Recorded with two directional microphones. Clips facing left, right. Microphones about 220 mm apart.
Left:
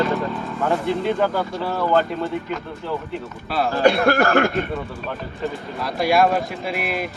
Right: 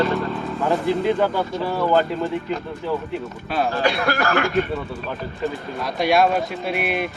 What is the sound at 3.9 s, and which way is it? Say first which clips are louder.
Speech: left 5 dB; 50° left (ahead or behind).